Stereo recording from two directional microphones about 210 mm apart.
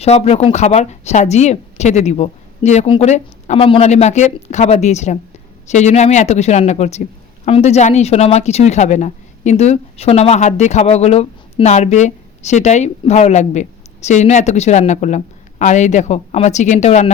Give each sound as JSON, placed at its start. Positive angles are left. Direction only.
{"t": 0.0, "sound": "speech", "side_deg": 30}